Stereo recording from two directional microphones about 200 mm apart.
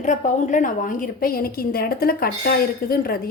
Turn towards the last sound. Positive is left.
turn(degrees=50)  # may be behind; listen again after turning